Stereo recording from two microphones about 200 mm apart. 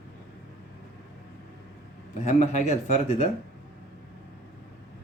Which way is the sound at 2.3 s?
35° left (ahead or behind).